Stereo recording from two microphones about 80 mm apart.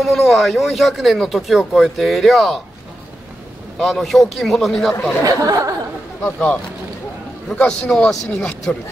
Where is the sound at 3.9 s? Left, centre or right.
Centre.